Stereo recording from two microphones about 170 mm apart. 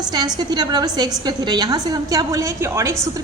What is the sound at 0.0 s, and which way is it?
A woman's voice, 25° right (ahead or behind).